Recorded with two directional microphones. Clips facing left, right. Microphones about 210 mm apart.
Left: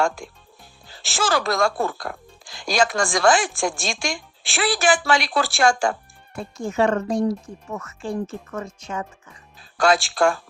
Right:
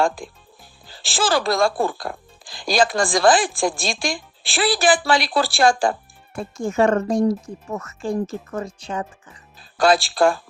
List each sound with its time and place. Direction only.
0.2 s speech: 35° right (ahead or behind)